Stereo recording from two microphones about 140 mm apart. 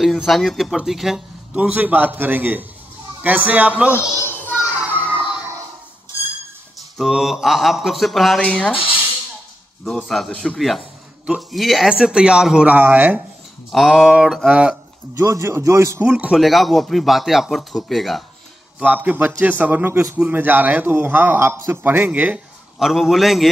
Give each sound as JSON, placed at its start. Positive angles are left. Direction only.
{"t": 0.0, "sound": "a man's voice", "side_deg": 0}
{"t": 3.9, "sound": "children playing", "side_deg": 15}
{"t": 4.6, "sound": "a sound", "side_deg": -10}
{"t": 7.0, "sound": "a man's voice", "side_deg": 0}
{"t": 9.8, "sound": "a man's voice", "side_deg": 0}
{"t": 13.7, "sound": "a man's voice", "side_deg": 0}
{"t": 15.2, "sound": "a man's voice", "side_deg": -20}
{"t": 16.1, "sound": "a man's voice", "side_deg": -5}
{"t": 18.8, "sound": "a man's voice", "side_deg": -10}